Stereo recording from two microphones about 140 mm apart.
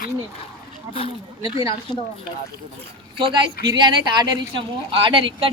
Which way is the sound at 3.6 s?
30° right (ahead or behind).